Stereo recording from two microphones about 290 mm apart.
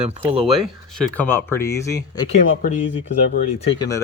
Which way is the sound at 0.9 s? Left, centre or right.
Centre.